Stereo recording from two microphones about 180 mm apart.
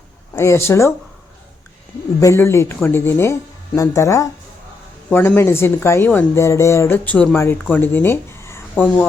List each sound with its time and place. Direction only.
0.3 s speech: 15° left (ahead or behind)
2.2 s speech: 15° left (ahead or behind)